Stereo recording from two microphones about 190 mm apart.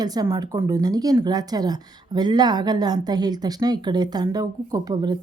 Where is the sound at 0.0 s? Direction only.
20° right (ahead or behind).